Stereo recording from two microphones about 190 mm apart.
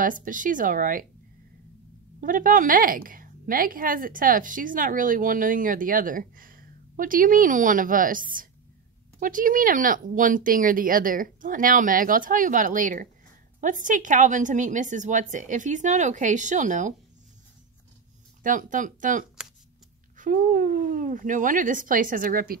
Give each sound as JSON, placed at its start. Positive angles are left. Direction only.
{"t": 0.0, "sound": "a woman's voice", "side_deg": -45}
{"t": 2.1, "sound": "a woman's voice", "side_deg": -45}
{"t": 9.2, "sound": "a woman's voice", "side_deg": -45}
{"t": 18.4, "sound": "a woman's voice", "side_deg": -45}